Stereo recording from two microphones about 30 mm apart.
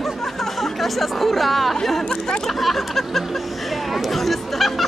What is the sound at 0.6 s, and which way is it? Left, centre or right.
Speech, centre.